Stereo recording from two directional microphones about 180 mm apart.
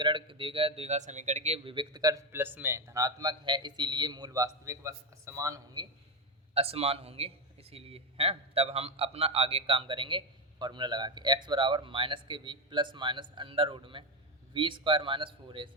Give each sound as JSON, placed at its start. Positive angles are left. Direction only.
{"t": 0.0, "sound": "a man's voice", "side_deg": -25}
{"t": 6.5, "sound": "a man's voice", "side_deg": -35}